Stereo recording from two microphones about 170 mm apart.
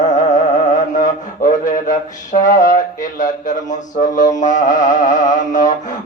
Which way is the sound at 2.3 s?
50° left (ahead or behind).